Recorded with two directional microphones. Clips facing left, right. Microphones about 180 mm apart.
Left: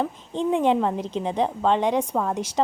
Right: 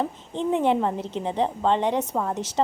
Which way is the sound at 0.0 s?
20° right (ahead or behind).